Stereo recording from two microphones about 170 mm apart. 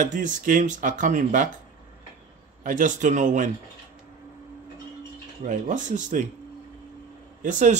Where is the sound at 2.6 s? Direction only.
50° right (ahead or behind).